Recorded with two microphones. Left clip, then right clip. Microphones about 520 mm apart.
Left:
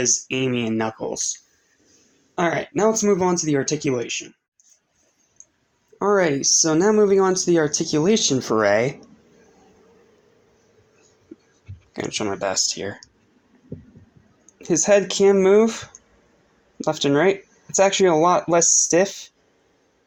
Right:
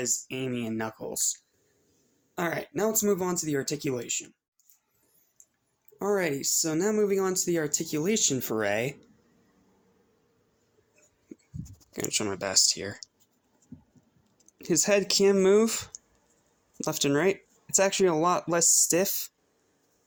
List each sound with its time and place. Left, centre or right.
0.3 s speech: right
5.4 s a sound: right
6.0 s speech: right
11.9 s speech: right
14.4 s speech: right
18.1 s speech: right